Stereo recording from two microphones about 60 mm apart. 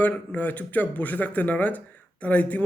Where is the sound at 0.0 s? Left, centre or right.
Left.